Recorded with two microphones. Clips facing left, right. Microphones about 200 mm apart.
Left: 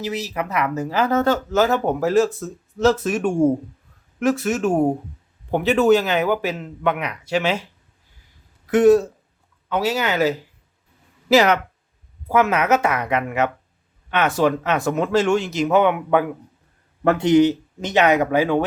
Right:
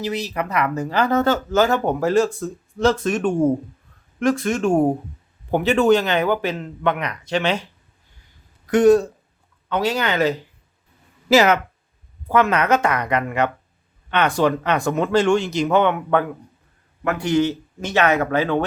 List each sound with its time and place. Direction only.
0.0 s speech: 5° left (ahead or behind)